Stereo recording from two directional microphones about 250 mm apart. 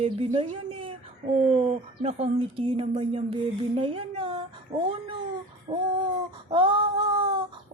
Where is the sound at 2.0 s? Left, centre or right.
Right.